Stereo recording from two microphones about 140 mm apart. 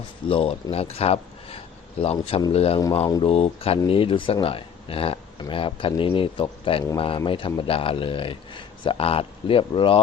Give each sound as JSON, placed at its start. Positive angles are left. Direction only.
{"t": 0.3, "sound": "speech", "side_deg": 45}